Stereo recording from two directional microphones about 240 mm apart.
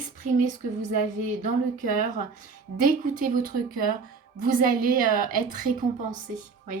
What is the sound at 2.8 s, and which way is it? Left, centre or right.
Speech, right.